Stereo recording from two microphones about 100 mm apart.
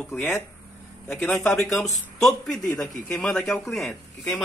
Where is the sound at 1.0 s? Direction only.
25° left (ahead or behind).